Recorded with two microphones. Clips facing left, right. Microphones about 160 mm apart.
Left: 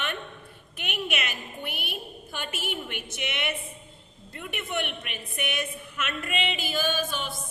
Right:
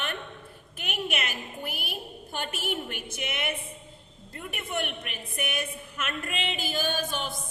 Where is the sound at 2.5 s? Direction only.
40° right (ahead or behind).